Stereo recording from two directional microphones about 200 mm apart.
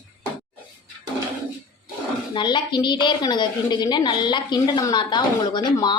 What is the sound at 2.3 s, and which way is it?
A woman's voice, 25° left (ahead or behind).